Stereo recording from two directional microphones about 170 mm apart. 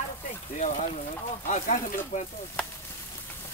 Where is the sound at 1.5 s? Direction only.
50° left (ahead or behind).